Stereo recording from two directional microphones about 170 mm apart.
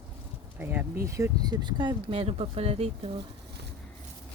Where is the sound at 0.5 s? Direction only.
10° right (ahead or behind); by 3.1 s 35° right (ahead or behind).